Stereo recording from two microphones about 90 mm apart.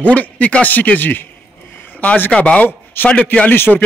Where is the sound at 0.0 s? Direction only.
15° left (ahead or behind).